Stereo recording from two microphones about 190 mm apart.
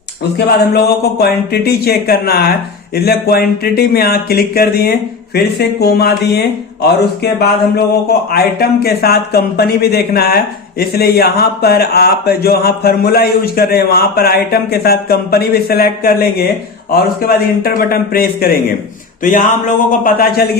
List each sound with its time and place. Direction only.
0.3 s a man's voice: 55° left (ahead or behind)